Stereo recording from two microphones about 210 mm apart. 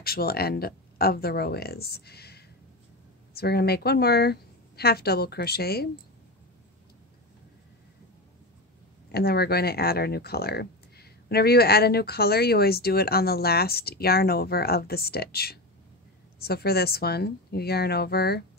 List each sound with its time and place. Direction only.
0.0 s speech: 45° left (ahead or behind)
9.1 s speech: 50° left (ahead or behind)